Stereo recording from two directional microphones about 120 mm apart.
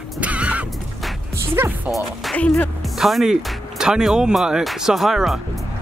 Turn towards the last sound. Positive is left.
turn(degrees=-5)  # may be behind; listen again after turning